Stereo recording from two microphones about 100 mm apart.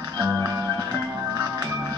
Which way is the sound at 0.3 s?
30° right (ahead or behind).